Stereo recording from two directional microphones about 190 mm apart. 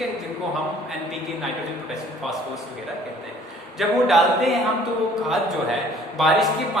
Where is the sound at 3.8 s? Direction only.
Centre (ahead or behind).